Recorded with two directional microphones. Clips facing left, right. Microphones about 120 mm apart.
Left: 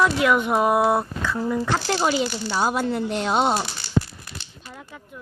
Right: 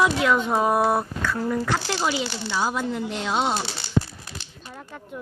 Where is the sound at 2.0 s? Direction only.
50° left (ahead or behind).